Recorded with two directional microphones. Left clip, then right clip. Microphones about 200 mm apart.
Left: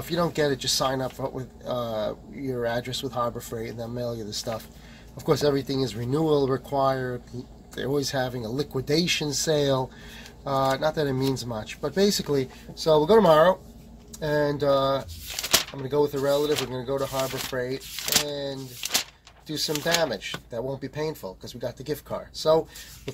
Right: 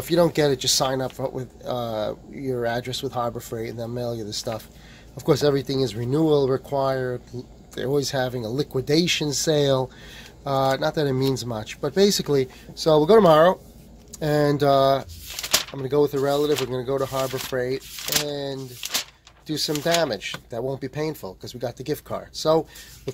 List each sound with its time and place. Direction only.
0.1 s speech: 35° right (ahead or behind); by 22.6 s 60° right (ahead or behind)